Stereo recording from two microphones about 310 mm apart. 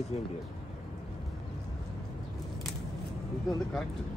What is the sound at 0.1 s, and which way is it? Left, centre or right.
Speech, centre.